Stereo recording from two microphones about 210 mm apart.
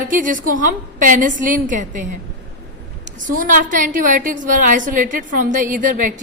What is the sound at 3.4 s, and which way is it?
A woman's voice, 40° right (ahead or behind).